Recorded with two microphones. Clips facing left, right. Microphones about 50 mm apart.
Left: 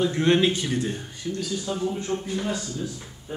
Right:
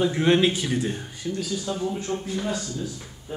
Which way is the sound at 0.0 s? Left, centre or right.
Centre.